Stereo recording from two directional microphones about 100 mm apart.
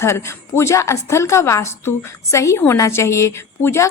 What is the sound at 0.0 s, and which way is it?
A woman's voice, 30° left (ahead or behind).